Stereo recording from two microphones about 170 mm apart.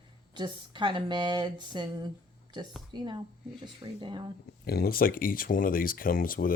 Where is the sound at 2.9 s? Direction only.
25° right (ahead or behind).